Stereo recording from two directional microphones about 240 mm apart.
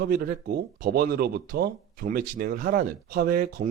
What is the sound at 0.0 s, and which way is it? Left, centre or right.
Speech, right.